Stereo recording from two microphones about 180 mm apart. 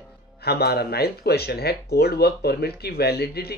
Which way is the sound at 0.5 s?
60° left (ahead or behind).